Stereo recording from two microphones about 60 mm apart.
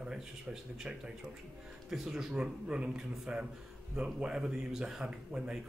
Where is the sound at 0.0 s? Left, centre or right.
Centre.